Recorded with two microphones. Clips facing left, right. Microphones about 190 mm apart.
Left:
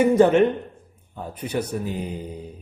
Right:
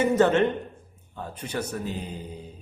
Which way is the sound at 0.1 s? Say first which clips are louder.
Left 4 dB; 10° left (ahead or behind).